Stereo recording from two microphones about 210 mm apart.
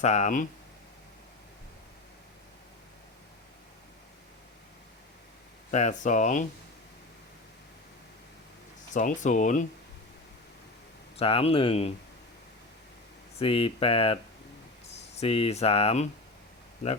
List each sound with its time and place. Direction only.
0.0 s speech: 35° left (ahead or behind)
5.7 s speech: 35° left (ahead or behind)
8.9 s speech: 35° left (ahead or behind)
11.2 s speech: 25° left (ahead or behind)
13.4 s speech: 25° left (ahead or behind)